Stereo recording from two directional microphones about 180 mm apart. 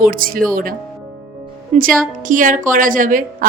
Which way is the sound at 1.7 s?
35° right (ahead or behind).